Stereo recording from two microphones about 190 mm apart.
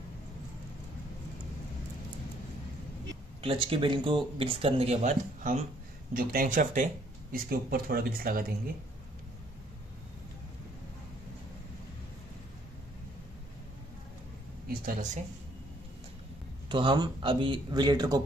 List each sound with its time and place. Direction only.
3.4 s speech: 25° right (ahead or behind); by 8.5 s 50° right (ahead or behind)
14.7 s a sound: 50° right (ahead or behind)
16.6 s speech: 25° right (ahead or behind)